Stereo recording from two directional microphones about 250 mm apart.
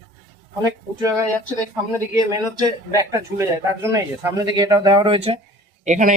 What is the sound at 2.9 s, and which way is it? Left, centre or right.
Speech, centre.